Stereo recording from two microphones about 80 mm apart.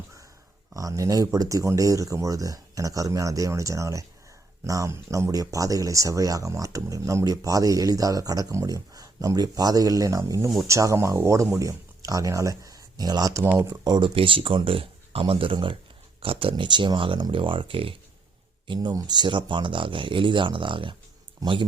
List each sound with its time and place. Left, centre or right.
0.7 s speech: right
13.8 s speech: right
17.3 s speech: right
18.7 s speech: right